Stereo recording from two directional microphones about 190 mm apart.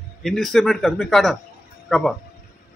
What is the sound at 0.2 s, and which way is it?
Speech, centre (ahead or behind).